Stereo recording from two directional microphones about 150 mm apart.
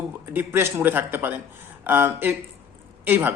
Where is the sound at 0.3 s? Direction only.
15° right (ahead or behind).